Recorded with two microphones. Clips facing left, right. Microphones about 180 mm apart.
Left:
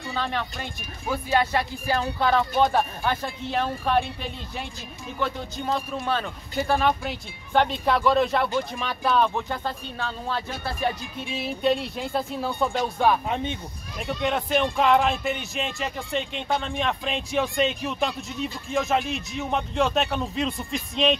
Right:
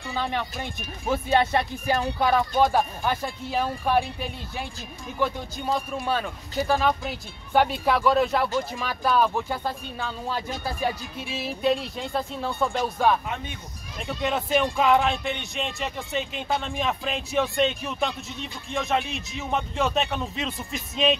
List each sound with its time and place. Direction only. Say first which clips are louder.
0.1 s speech: right 1 dB; 15° right (ahead or behind)
13.3 s speech: left 6 dB; 25° left (ahead or behind)
14.0 s speech: left 1 dB; centre (ahead or behind)